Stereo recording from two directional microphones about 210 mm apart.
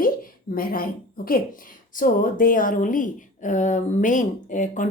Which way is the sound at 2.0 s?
40° left (ahead or behind).